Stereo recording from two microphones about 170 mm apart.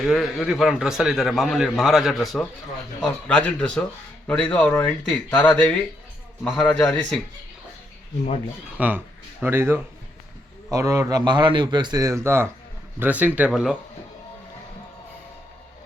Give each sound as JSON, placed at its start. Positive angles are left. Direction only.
{"t": 0.0, "sound": "a man's voice", "side_deg": 0}
{"t": 8.8, "sound": "a man's voice", "side_deg": -10}